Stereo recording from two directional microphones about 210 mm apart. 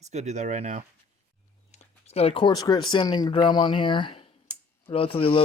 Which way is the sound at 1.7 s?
30° left (ahead or behind).